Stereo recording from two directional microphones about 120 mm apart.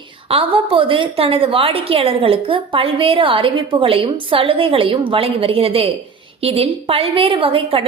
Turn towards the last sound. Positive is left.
turn(degrees=-50)  # may be behind; listen again after turning